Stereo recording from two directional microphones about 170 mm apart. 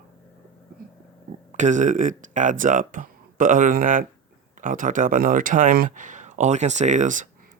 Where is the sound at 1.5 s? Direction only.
45° right (ahead or behind).